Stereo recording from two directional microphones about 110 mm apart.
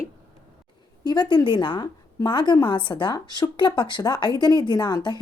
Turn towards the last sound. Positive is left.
turn(degrees=40)  # may be behind; listen again after turning